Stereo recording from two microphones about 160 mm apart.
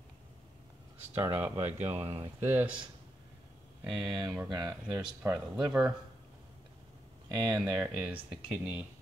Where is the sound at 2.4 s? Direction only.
10° right (ahead or behind).